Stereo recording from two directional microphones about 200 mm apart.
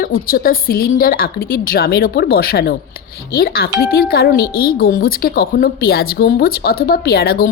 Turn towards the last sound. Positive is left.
turn(degrees=50)  # may be behind; listen again after turning